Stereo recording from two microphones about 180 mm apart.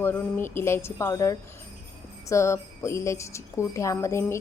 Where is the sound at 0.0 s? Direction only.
10° left (ahead or behind).